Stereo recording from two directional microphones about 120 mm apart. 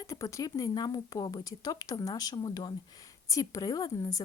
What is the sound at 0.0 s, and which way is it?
Speech, 25° left (ahead or behind).